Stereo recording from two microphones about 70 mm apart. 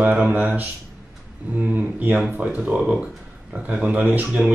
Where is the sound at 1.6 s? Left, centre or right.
Right.